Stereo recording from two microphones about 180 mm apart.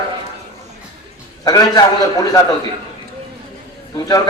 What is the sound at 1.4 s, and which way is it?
A man's voice, 20° left (ahead or behind).